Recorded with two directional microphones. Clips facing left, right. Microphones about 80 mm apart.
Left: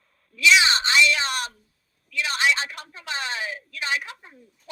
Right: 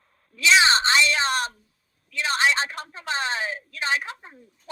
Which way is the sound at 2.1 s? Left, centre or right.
Right.